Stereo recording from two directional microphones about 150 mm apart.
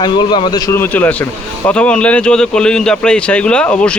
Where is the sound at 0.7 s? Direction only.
15° left (ahead or behind).